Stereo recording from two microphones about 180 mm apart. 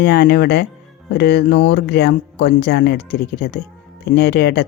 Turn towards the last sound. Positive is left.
turn(degrees=65)  # may be behind; listen again after turning